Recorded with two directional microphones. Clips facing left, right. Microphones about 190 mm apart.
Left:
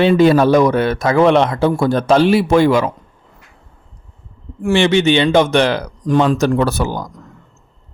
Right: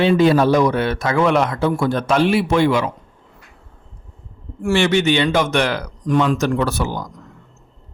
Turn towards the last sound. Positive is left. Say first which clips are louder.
# left 4 dB
turn(degrees=40)  # may be behind; listen again after turning